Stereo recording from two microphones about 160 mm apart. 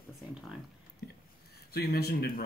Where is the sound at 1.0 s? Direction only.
75° left (ahead or behind).